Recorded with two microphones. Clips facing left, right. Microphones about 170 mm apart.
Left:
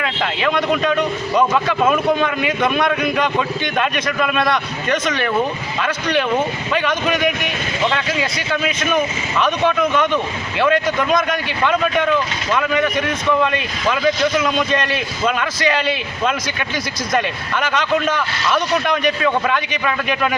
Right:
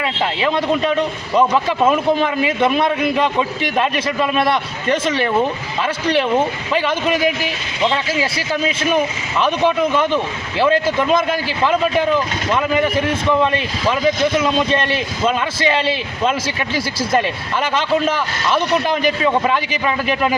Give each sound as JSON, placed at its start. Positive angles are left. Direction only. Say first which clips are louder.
{"t": 0.3, "sound": "speech", "louder": "even", "side_deg": -30}
{"t": 2.2, "sound": "speech", "louder": "right 2 dB", "side_deg": -30}
{"t": 3.8, "sound": "speech", "louder": "right 2 dB", "side_deg": -30}